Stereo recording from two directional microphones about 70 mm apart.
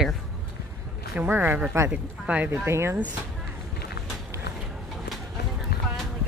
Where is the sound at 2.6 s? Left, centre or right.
Right.